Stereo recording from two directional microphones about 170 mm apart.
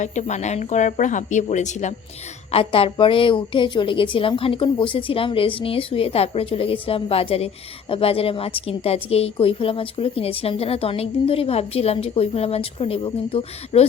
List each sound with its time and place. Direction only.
0.0 s speech: 45° left (ahead or behind)
2.5 s a woman's voice: 35° left (ahead or behind)